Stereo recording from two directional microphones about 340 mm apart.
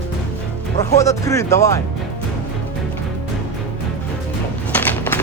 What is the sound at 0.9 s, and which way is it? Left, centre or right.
Speech, centre.